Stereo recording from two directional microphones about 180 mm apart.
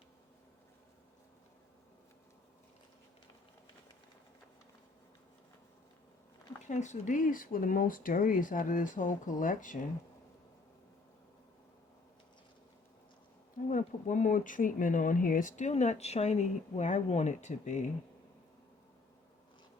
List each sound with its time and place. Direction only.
6.6 s speech: 40° left (ahead or behind)
13.7 s speech: 45° left (ahead or behind)